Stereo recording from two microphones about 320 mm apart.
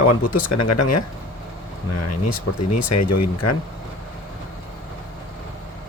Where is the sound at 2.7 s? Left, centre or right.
Left.